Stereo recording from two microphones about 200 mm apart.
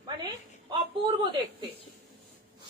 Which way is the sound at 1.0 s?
20° right (ahead or behind).